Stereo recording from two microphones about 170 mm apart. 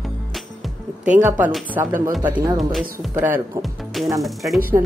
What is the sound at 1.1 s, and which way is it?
Speech, 10° right (ahead or behind).